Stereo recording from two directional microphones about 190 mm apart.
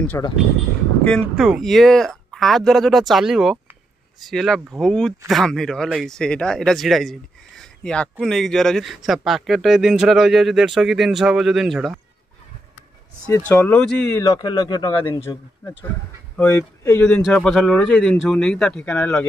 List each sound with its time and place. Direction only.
0.2 s speech: 15° left (ahead or behind)
1.3 s speech: centre (ahead or behind)
13.5 s speech: 5° left (ahead or behind)
14.2 s a man's voice: 20° left (ahead or behind)
17.1 s speech: centre (ahead or behind)